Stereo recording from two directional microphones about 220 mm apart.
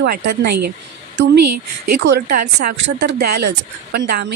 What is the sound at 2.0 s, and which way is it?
A woman's voice, 50° right (ahead or behind).